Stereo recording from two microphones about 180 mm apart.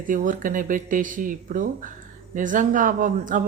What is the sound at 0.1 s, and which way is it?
Speech, 45° right (ahead or behind).